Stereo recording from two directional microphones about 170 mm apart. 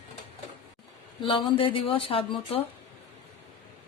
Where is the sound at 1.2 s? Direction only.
30° left (ahead or behind).